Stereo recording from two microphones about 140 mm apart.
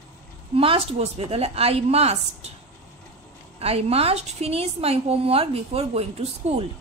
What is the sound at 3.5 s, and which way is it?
A woman's voice, 45° right (ahead or behind).